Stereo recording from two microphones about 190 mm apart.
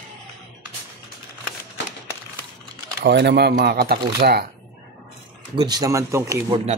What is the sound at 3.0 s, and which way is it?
Speech, 65° right (ahead or behind).